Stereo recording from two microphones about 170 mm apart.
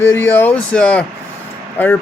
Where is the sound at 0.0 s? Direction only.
15° left (ahead or behind).